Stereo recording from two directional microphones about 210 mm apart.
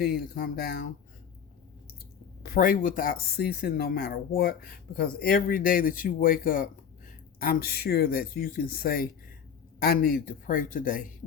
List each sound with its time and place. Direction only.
0.0 s speech: 45° left (ahead or behind)
2.4 s a man's voice: 40° left (ahead or behind)